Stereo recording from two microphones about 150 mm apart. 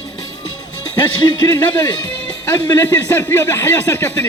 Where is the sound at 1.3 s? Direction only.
30° left (ahead or behind).